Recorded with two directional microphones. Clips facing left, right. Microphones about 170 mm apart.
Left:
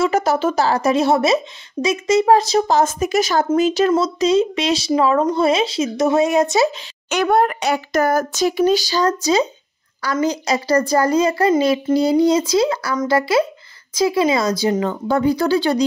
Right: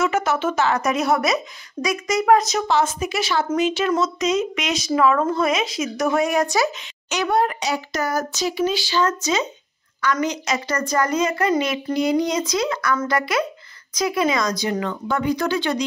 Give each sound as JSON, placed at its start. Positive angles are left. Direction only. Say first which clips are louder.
{"t": 0.0, "sound": "a woman's voice", "louder": "left 4 dB", "side_deg": 35}
{"t": 7.1, "sound": "a woman's voice", "louder": "left 4 dB", "side_deg": 55}